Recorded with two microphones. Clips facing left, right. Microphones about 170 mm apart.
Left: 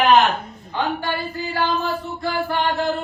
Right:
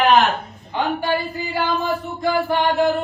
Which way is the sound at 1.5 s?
15° right (ahead or behind).